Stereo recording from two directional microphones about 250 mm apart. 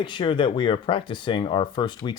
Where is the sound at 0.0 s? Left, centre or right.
Centre.